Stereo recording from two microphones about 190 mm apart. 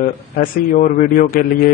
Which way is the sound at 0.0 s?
45° left (ahead or behind).